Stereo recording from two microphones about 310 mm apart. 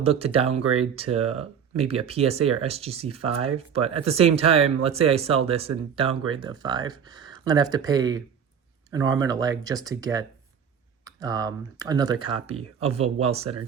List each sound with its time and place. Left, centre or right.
0.0 s speech: centre